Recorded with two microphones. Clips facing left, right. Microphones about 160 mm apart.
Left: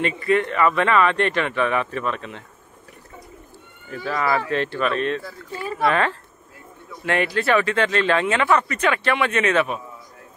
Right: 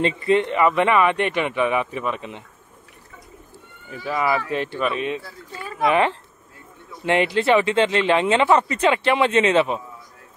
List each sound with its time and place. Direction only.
0.0 s speech: 25° right (ahead or behind)
3.9 s speech: 10° right (ahead or behind)